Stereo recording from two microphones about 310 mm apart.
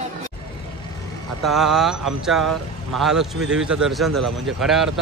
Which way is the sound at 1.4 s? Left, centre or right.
Centre.